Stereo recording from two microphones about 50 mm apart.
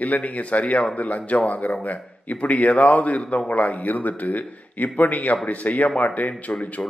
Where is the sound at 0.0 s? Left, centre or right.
Left.